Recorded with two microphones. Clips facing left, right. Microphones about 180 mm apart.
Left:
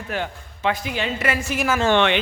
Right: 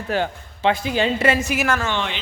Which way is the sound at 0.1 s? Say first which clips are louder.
Right 5 dB; 30° right (ahead or behind).